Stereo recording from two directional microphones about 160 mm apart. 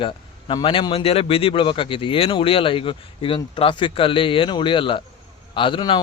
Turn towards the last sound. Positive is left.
turn(degrees=30)  # may be behind; listen again after turning